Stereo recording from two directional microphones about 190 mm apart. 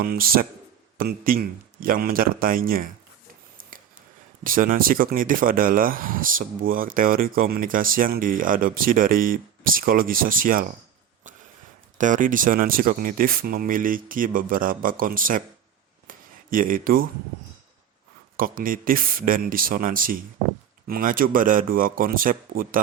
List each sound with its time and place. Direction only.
0.0 s speech: 50° right (ahead or behind)
3.6 s a sound: 45° right (ahead or behind)
4.4 s speech: 45° right (ahead or behind)
11.9 s speech: 45° right (ahead or behind)
16.0 s a sound: 45° right (ahead or behind)
18.3 s speech: 50° right (ahead or behind)